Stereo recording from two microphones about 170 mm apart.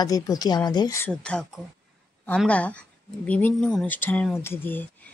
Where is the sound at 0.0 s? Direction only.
20° left (ahead or behind).